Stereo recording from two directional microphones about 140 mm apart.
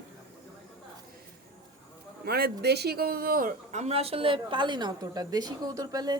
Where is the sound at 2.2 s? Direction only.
90° right.